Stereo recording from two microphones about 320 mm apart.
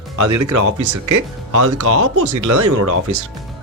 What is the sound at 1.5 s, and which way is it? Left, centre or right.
Speech, right.